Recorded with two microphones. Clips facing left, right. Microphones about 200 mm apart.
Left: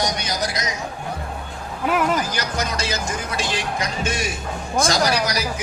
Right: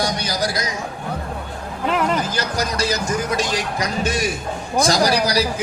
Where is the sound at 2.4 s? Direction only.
35° right (ahead or behind).